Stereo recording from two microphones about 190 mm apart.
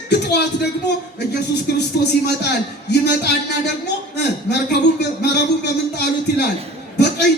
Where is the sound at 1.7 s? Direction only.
60° left (ahead or behind).